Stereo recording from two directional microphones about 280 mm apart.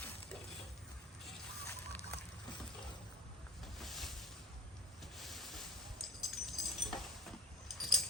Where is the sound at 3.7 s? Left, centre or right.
Centre.